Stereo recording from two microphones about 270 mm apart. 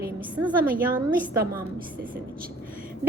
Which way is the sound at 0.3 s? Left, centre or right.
Centre.